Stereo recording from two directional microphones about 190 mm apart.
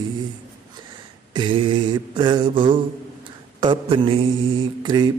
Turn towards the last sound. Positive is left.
turn(degrees=-25)  # may be behind; listen again after turning